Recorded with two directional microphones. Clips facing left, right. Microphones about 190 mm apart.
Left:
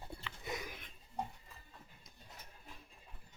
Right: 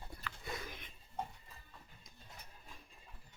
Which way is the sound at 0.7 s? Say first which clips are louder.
Even; centre (ahead or behind).